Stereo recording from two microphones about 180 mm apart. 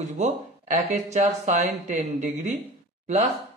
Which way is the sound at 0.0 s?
40° right (ahead or behind).